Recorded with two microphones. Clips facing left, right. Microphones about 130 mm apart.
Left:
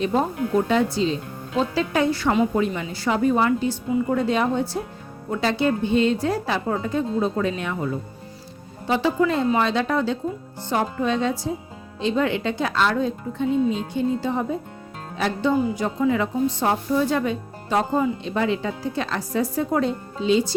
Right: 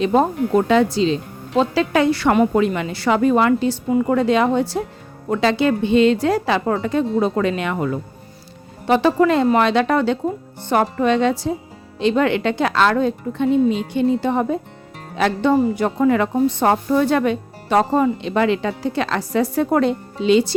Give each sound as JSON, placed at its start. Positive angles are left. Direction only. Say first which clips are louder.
{"t": 0.0, "sound": "a woman's voice", "louder": "right 5 dB", "side_deg": -80}
{"t": 8.9, "sound": "speech", "louder": "right 6 dB", "side_deg": -70}